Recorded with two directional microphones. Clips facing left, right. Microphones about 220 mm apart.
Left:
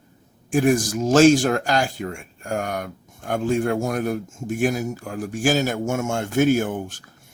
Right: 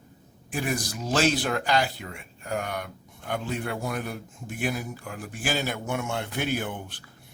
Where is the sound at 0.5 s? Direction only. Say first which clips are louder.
Left 11 dB; 45° left (ahead or behind).